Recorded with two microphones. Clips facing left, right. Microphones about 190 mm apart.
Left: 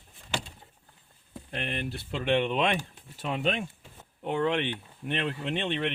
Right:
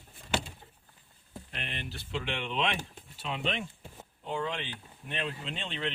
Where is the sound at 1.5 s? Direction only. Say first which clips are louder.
Left 8 dB; 50° left (ahead or behind).